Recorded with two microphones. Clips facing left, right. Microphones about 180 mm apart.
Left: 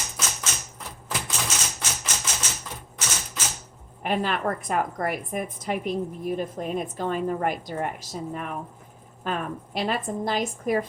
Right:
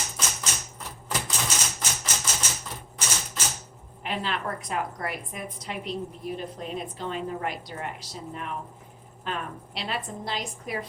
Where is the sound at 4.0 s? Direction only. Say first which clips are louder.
Left 5 dB; 50° left (ahead or behind).